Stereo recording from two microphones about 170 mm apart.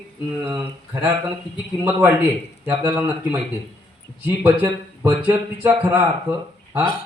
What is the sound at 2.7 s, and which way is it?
A man's voice, 10° right (ahead or behind).